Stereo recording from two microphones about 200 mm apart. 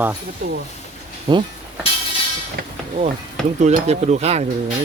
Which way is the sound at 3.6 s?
35° right (ahead or behind).